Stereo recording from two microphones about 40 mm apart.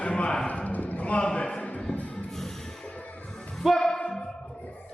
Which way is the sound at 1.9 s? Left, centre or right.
Left.